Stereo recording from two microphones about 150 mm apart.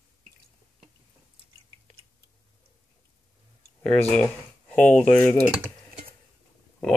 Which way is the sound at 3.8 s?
5° left (ahead or behind).